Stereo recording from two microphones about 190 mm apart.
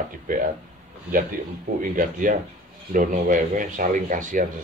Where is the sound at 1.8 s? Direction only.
45° right (ahead or behind).